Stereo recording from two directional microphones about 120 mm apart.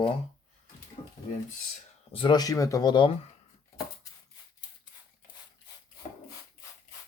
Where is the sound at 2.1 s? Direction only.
45° left (ahead or behind).